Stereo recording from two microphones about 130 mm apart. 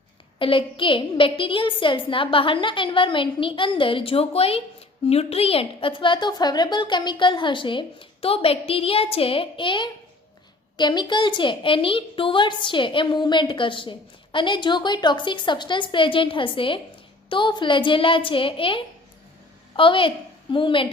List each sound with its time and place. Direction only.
0.3 s a woman's voice: 40° left (ahead or behind)